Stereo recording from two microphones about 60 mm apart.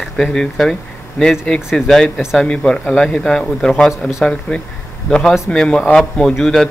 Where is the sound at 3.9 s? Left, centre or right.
Centre.